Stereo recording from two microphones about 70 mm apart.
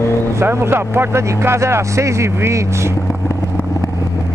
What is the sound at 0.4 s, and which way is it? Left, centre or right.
Speech, right.